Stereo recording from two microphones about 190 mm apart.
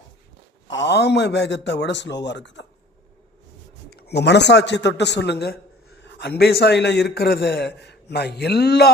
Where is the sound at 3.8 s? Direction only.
55° left (ahead or behind).